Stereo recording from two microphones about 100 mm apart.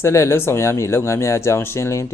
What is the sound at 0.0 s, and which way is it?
Speech, 30° left (ahead or behind).